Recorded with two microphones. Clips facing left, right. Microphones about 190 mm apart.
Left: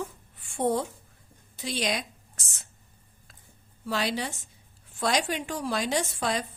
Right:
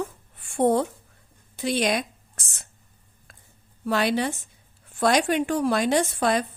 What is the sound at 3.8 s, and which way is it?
A woman's voice, 60° right (ahead or behind).